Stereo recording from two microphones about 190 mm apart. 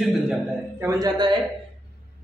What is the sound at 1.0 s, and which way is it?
Speech, 20° right (ahead or behind).